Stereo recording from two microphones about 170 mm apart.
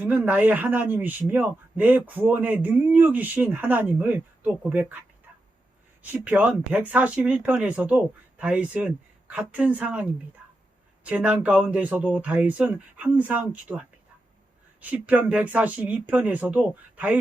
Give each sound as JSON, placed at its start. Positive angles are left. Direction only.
{"t": 0.0, "sound": "a man's voice", "side_deg": -10}
{"t": 6.0, "sound": "a man's voice", "side_deg": -10}